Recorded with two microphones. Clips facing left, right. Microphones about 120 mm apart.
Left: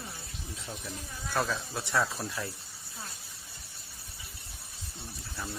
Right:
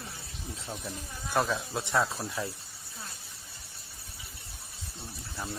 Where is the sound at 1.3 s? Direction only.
20° right (ahead or behind).